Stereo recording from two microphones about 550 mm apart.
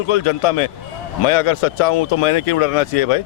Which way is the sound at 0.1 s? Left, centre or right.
Left.